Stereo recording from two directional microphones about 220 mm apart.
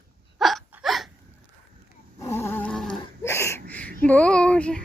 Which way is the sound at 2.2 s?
10° left (ahead or behind).